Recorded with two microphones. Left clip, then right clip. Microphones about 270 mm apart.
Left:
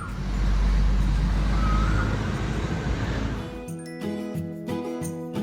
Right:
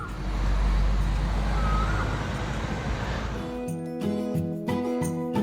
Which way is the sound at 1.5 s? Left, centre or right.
Right.